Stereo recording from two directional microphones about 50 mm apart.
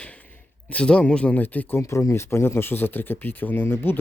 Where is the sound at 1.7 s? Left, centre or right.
Left.